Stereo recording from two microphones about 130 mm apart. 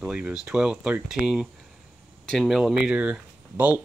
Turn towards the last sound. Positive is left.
turn(degrees=-10)  # may be behind; listen again after turning